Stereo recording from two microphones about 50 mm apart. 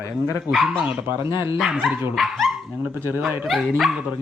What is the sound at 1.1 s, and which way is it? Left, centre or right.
Speech, right.